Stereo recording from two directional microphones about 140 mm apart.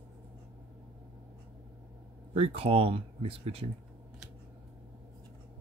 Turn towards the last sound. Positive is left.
turn(degrees=-40)  # may be behind; listen again after turning